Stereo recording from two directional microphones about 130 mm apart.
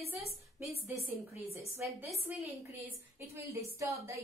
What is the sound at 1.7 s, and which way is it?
A woman's voice, 15° right (ahead or behind).